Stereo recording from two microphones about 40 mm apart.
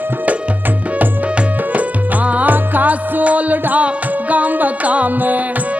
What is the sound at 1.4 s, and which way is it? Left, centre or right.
Music, right.